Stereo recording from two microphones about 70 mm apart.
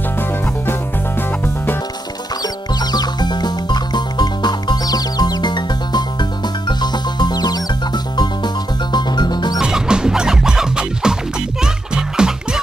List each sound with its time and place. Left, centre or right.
0.7 s music: left
2.4 s music: left
8.9 s music: left
9.6 s music: centre